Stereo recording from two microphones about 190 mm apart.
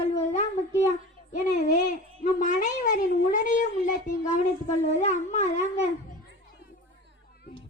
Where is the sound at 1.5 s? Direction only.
40° left (ahead or behind).